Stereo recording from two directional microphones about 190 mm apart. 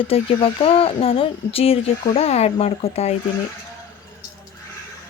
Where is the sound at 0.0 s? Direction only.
30° left (ahead or behind).